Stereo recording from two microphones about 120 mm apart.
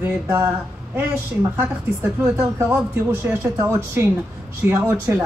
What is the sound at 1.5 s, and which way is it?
A woman's voice, 20° right (ahead or behind).